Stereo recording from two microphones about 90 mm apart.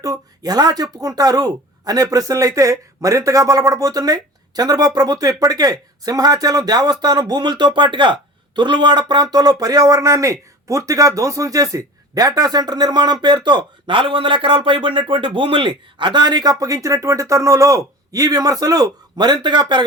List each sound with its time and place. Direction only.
0.0 s a woman's voice: 45° right (ahead or behind); by 19.8 s 60° right (ahead or behind)